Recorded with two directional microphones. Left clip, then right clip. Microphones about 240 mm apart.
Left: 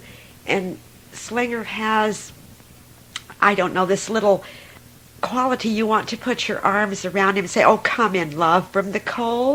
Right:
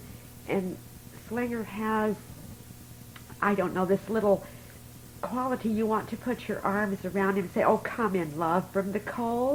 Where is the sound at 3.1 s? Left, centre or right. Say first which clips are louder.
Left 10 dB; left.